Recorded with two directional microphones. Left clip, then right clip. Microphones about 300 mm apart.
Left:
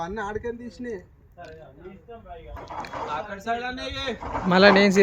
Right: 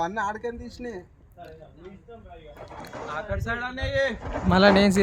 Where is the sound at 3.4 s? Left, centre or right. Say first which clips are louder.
Left 2 dB; centre.